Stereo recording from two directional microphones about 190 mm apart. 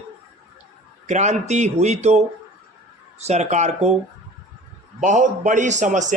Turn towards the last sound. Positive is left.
turn(degrees=-40)  # may be behind; listen again after turning